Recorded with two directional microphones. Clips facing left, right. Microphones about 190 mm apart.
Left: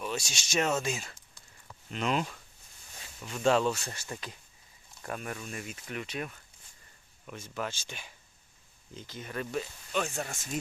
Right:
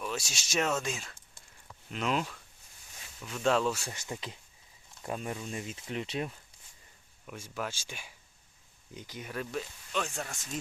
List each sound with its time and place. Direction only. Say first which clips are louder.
0.0 s speech: left 1 dB; centre (ahead or behind)
3.9 s speech: right 1 dB; 20° right (ahead or behind)
7.3 s speech: left 1 dB; 10° right (ahead or behind)